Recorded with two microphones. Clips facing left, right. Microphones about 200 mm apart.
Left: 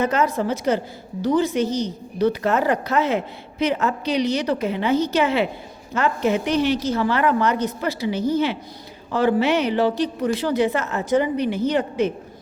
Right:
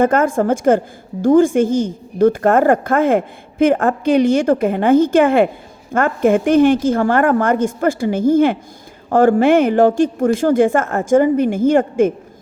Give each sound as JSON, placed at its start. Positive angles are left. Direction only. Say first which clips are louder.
{"t": 0.0, "sound": "a woman's voice", "louder": "right 6 dB", "side_deg": -50}